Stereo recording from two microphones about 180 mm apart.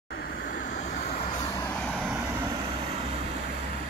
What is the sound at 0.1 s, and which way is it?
Vehicle, 55° left (ahead or behind).